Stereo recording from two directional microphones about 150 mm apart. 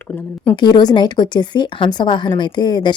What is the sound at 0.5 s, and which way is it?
A woman's voice, 30° left (ahead or behind).